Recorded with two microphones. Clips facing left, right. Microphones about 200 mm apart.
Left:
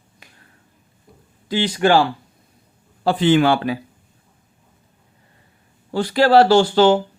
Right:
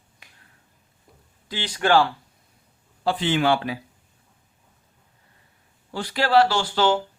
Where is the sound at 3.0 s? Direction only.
45° left (ahead or behind).